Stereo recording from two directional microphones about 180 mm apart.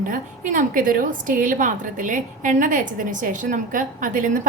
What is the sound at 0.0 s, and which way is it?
A woman's voice, 45° right (ahead or behind).